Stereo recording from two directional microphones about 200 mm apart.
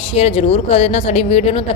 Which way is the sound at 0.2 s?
30° left (ahead or behind).